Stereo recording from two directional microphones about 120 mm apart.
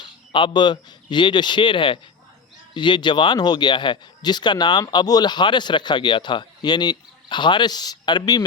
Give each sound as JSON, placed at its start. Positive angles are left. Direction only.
{"t": 0.0, "sound": "speech", "side_deg": 40}